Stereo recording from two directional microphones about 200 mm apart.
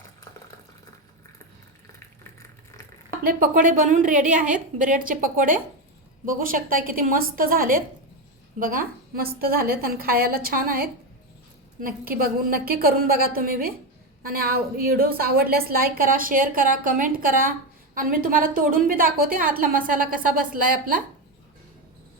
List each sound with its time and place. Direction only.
3.2 s a woman's voice: 45° right (ahead or behind)